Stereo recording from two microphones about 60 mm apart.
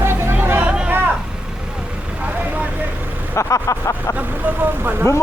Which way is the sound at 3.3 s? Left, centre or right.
Left.